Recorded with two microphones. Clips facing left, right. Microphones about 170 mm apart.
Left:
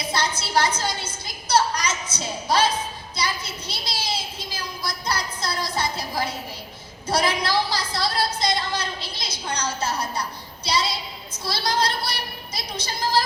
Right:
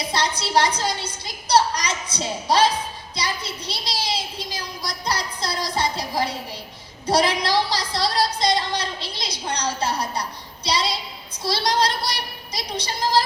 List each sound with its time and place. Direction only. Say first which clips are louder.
0.1 s a sound: right 2 dB; 30° right (ahead or behind)
0.8 s a woman's voice: right 2 dB; 30° right (ahead or behind)
7.1 s a woman's voice: right 3 dB; 30° right (ahead or behind)